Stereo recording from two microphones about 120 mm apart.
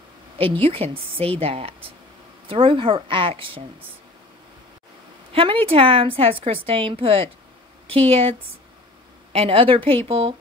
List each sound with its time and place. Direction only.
0.4 s a woman's voice: 50° right (ahead or behind)
5.3 s a woman's voice: 50° right (ahead or behind)